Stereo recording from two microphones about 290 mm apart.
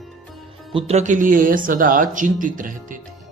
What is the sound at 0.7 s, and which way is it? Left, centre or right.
Speech, centre.